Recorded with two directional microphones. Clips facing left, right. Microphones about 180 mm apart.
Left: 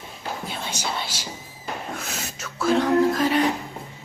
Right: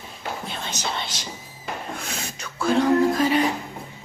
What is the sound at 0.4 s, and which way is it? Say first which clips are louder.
Whispering: even; 10° left (ahead or behind).